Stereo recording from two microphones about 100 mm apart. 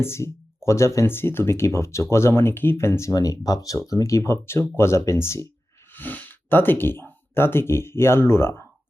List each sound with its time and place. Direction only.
0.0 s speech: 30° left (ahead or behind)